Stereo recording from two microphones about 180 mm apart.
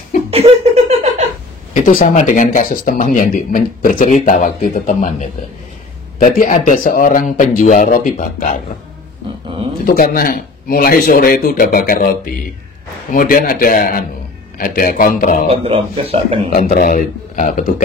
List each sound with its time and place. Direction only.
0.3 s a sound: 35° right (ahead or behind)
1.7 s speech: 50° left (ahead or behind)
6.2 s speech: 50° left (ahead or behind)
9.8 s speech: 55° left (ahead or behind)
15.5 s speech: 30° right (ahead or behind)
16.7 s speech: 50° left (ahead or behind)